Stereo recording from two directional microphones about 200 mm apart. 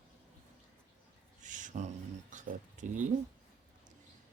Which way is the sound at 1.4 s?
40° right (ahead or behind).